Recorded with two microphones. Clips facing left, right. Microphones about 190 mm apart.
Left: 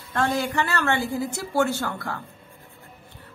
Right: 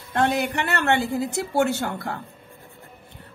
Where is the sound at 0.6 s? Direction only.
20° right (ahead or behind).